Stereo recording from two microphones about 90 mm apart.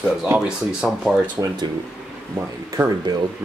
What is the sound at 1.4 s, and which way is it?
Speech, 45° right (ahead or behind).